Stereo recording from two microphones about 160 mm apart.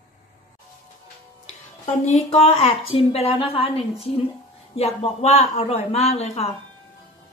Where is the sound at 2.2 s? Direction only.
40° left (ahead or behind).